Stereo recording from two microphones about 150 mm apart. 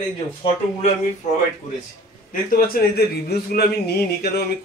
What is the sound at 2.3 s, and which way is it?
A man's voice, 85° left.